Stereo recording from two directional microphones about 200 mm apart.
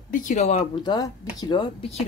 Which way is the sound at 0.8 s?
20° left (ahead or behind).